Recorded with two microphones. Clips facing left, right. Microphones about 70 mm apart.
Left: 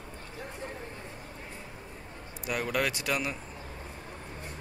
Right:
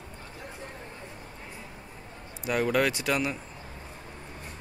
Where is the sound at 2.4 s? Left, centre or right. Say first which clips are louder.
Right 5 dB; centre.